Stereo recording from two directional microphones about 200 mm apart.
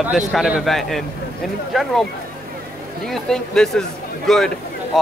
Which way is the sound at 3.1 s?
Centre (ahead or behind).